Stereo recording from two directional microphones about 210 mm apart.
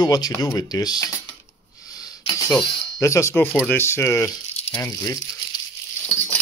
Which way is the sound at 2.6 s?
15° left (ahead or behind).